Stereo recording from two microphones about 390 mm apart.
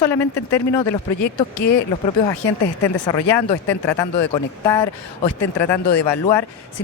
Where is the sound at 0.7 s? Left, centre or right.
Centre.